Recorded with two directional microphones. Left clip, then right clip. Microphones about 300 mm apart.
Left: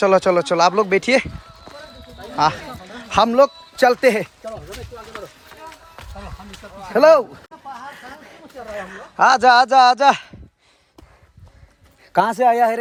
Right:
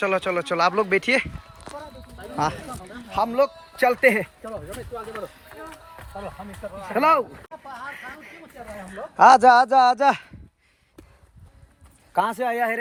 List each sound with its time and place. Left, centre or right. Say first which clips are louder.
0.0 s speech: left 8 dB; centre
2.3 s speech: left 7 dB; centre
3.1 s speech: left 8 dB; left
3.4 s speech: left 6 dB; centre
6.9 s speech: left 7 dB; centre
9.1 s a man's voice: left 1 dB; centre
12.1 s speech: left 8 dB; left